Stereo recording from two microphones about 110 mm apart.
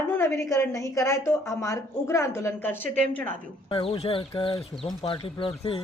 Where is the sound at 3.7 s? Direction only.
55° left (ahead or behind).